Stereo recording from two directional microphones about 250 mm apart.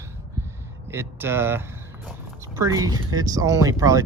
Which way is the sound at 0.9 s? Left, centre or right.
Centre.